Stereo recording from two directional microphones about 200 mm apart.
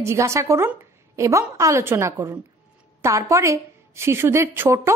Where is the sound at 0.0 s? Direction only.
15° right (ahead or behind).